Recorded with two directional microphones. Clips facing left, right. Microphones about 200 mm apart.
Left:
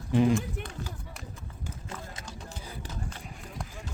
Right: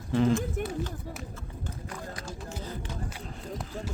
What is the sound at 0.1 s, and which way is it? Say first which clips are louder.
Speech: left 1 dB; 15° left (ahead or behind).